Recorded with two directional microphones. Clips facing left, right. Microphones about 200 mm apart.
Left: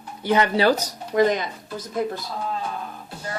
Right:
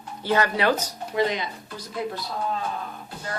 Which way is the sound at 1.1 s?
45° left (ahead or behind).